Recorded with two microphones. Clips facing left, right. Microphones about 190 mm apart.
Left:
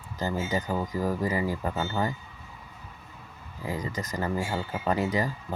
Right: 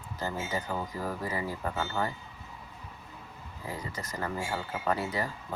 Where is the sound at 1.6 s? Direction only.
20° left (ahead or behind).